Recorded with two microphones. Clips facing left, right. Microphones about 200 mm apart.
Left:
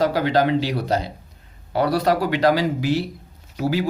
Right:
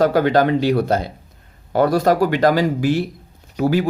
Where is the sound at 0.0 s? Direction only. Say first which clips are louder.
Right 4 dB; 50° right (ahead or behind).